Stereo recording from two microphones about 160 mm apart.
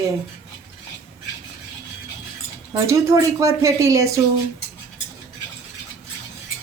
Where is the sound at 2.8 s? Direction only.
20° right (ahead or behind).